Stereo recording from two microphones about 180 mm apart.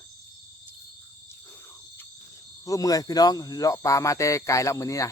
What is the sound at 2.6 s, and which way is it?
Speech, 20° left (ahead or behind).